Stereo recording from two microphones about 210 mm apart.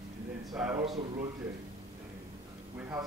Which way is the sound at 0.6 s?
5° right (ahead or behind).